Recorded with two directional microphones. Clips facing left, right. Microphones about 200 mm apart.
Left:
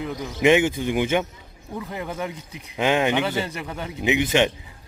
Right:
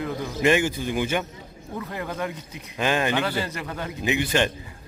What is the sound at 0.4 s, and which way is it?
A man's voice, 20° left (ahead or behind).